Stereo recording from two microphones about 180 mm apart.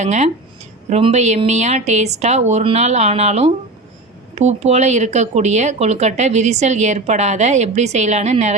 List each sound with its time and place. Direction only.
0.0 s speech: 40° right (ahead or behind)